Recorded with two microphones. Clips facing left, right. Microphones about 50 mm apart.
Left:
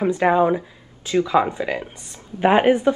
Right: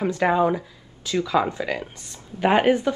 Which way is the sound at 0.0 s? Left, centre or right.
Left.